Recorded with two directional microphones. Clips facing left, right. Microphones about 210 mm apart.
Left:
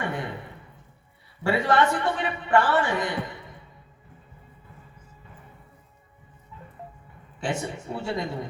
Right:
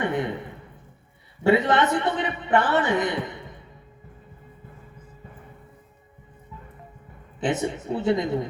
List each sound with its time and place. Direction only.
0.0 s a sound: 20° right (ahead or behind)
1.5 s a man's voice: 20° right (ahead or behind)
7.3 s a man's voice: 20° right (ahead or behind)